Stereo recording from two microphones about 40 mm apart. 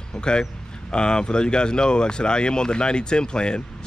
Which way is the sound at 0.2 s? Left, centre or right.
Left.